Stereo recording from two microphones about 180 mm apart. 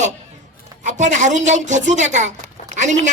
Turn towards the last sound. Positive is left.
turn(degrees=-40)  # may be behind; listen again after turning